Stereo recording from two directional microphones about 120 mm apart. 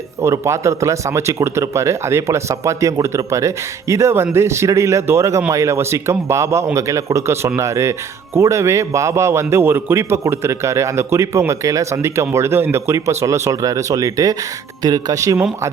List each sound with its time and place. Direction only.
0.2 s speech: 25° right (ahead or behind)